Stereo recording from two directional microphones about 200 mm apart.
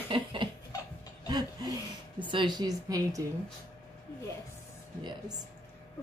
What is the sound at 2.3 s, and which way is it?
Speech, 20° right (ahead or behind).